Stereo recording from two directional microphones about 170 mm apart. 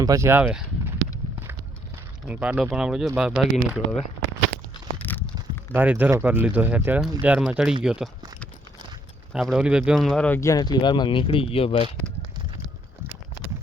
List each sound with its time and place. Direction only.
0.0 s speech: 20° right (ahead or behind)
2.2 s speech: 10° right (ahead or behind)
4.9 s a sound: 10° left (ahead or behind)
5.7 s speech: 10° right (ahead or behind)
9.3 s speech: 5° right (ahead or behind); by 11.9 s 35° left (ahead or behind)